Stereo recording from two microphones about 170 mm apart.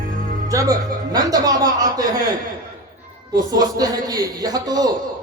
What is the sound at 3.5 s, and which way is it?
A man's voice, 20° right (ahead or behind).